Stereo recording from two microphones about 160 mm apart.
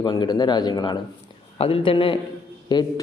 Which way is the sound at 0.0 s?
25° left (ahead or behind).